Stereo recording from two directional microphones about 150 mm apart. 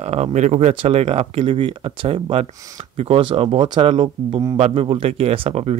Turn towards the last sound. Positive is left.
turn(degrees=-40)  # may be behind; listen again after turning